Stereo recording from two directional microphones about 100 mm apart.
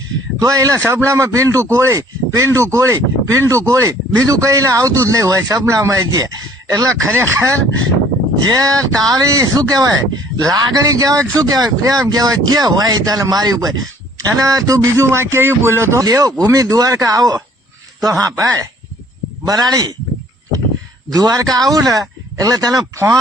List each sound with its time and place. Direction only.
0.3 s speech: 35° right (ahead or behind)
21.1 s speech: 40° right (ahead or behind)